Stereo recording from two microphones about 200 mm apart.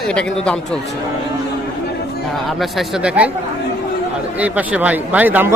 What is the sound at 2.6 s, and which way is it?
Speech, 5° right (ahead or behind).